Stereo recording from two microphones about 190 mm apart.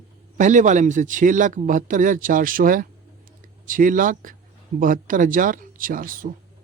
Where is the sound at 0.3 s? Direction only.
40° right (ahead or behind).